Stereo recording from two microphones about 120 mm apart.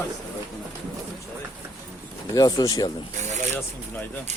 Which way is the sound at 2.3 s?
30° left (ahead or behind).